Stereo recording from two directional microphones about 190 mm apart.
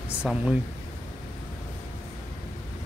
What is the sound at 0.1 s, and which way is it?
Speech, 5° right (ahead or behind).